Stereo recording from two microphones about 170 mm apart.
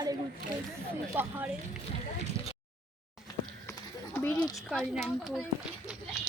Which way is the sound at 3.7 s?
15° left (ahead or behind).